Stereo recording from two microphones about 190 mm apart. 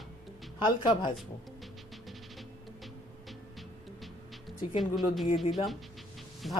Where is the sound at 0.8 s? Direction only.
25° left (ahead or behind).